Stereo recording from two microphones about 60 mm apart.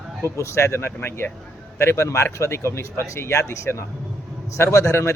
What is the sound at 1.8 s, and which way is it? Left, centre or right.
Speech, left.